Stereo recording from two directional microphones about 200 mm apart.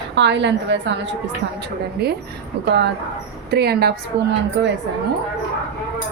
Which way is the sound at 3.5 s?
55° right (ahead or behind).